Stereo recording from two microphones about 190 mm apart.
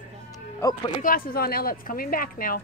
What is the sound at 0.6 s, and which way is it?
Speech, 20° left (ahead or behind).